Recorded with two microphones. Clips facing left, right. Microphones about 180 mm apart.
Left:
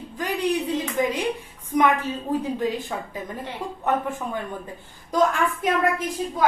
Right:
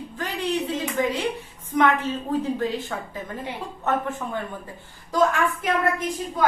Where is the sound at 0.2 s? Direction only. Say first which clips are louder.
Left 2 dB; 15° left (ahead or behind).